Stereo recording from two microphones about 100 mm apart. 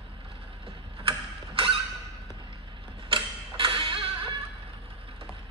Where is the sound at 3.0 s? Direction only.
60° right (ahead or behind).